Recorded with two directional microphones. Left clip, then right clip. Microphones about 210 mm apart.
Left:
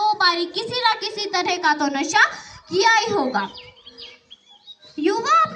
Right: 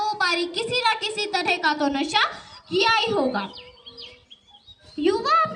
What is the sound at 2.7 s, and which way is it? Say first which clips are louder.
Speech: left 3 dB; 15° right (ahead or behind).